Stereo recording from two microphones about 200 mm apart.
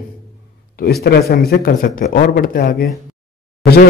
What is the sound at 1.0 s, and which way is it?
A man's voice, 50° left (ahead or behind).